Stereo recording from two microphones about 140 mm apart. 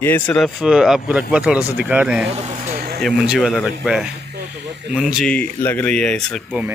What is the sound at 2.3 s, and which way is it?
Speech, 55° right (ahead or behind).